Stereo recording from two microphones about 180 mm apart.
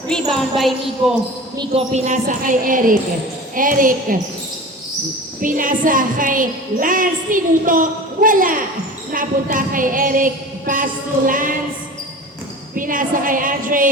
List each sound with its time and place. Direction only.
0.1 s jingle bell: centre (ahead or behind)
1.9 s a woman's voice: 45° right (ahead or behind)
5.4 s a woman's voice: 50° right (ahead or behind)
12.7 s a woman's voice: 50° right (ahead or behind)